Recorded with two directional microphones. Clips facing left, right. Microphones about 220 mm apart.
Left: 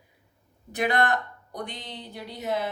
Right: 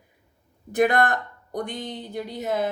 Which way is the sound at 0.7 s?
50° right (ahead or behind).